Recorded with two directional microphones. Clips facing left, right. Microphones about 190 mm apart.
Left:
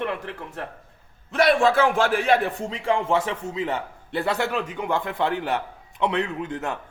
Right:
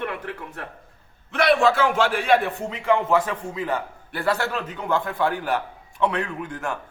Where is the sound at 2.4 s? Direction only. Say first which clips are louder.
Right 2 dB; 30° left (ahead or behind).